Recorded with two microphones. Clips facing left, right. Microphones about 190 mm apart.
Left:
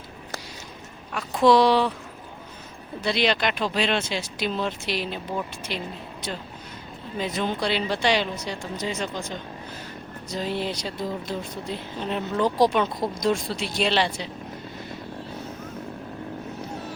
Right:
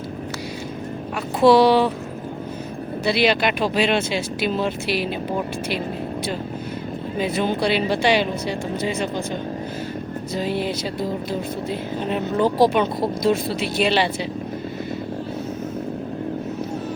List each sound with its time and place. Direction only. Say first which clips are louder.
1.1 s speech: right 4 dB; 5° right (ahead or behind)
3.0 s speech: right 4 dB; 10° right (ahead or behind)
7.2 s speech: right 5 dB; 10° right (ahead or behind)
10.3 s speech: right 4 dB; 5° right (ahead or behind)